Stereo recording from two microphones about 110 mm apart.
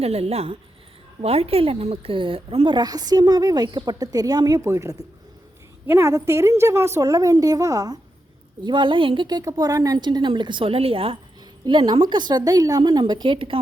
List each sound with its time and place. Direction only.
0.0 s speech: 65° right (ahead or behind)
2.7 s a woman's voice: 35° right (ahead or behind)
8.6 s a woman's voice: 45° right (ahead or behind)
11.6 s a woman's voice: 45° right (ahead or behind)